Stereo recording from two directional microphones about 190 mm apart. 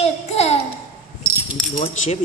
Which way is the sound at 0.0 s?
35° left (ahead or behind).